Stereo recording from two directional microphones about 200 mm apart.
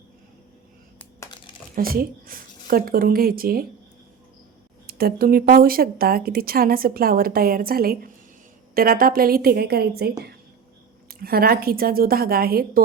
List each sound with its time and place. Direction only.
1.2 s crumpling: 25° left (ahead or behind)
1.7 s speech: 45° right (ahead or behind)
4.9 s speech: 50° right (ahead or behind)
11.1 s speech: 50° right (ahead or behind)